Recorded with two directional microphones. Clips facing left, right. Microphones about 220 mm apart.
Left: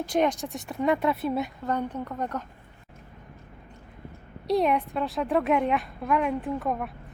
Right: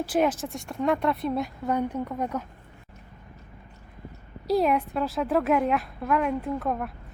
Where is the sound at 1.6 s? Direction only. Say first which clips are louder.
Right 2 dB; 10° right (ahead or behind).